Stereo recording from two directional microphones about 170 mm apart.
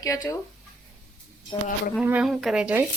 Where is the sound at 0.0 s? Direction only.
20° left (ahead or behind).